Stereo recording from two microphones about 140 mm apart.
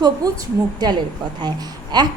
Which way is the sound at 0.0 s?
30° right (ahead or behind).